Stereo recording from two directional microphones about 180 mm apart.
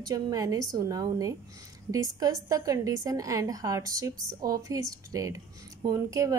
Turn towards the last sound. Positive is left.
turn(degrees=-20)  # may be behind; listen again after turning